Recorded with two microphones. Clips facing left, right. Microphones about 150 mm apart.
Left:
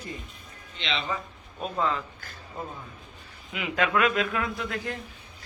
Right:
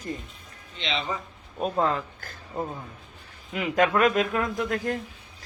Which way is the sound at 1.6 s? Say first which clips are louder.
Right 3 dB; 50° right (ahead or behind).